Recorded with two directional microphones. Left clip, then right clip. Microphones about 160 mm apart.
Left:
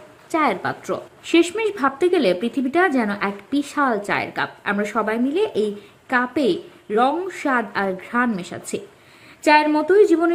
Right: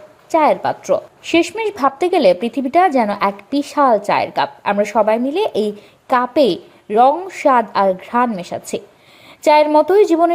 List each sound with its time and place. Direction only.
0.3 s a woman's voice: 15° right (ahead or behind)